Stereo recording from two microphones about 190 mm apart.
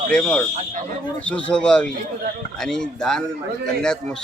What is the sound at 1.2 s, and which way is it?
A man's voice, 5° left (ahead or behind).